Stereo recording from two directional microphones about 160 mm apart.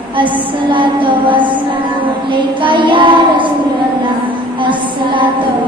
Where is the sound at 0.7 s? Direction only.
30° right (ahead or behind).